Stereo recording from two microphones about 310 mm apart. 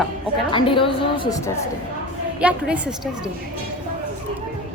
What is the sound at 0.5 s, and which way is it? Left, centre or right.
A woman's voice, centre.